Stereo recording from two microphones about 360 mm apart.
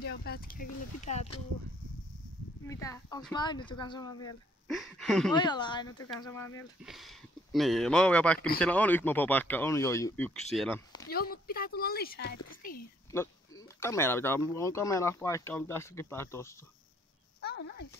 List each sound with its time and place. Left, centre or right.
0.0 s speech: left
2.6 s speech: centre
4.6 s speech: centre
5.3 s speech: centre
11.1 s speech: left
13.1 s speech: centre
17.4 s a sound: left